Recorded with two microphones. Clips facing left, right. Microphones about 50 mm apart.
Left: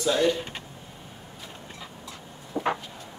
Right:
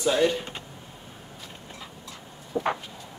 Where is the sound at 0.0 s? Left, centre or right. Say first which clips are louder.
Right 1 dB; centre.